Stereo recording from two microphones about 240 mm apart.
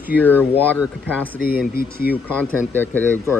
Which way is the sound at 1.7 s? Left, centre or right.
Left.